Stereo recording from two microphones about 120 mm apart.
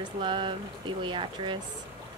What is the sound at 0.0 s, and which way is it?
Speech, 45° right (ahead or behind).